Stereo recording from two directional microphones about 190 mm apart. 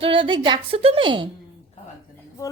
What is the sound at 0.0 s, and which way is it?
A woman's voice, 25° right (ahead or behind).